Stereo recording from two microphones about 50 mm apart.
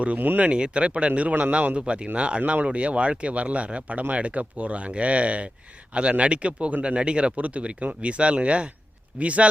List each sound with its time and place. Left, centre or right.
0.2 s speech: right
0.5 s speech: right